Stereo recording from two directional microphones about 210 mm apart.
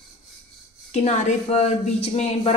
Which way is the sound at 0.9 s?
35° left (ahead or behind).